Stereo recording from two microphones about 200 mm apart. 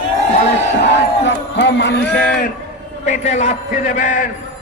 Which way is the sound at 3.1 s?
35° left (ahead or behind).